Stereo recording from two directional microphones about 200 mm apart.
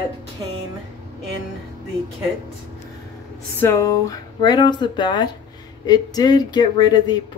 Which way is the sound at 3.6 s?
15° left (ahead or behind).